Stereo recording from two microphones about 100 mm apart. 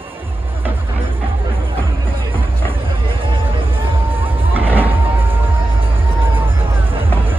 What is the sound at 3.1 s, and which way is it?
Music, 60° right (ahead or behind).